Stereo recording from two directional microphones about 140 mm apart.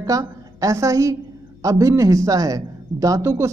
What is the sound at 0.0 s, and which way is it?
A woman's voice, 25° right (ahead or behind).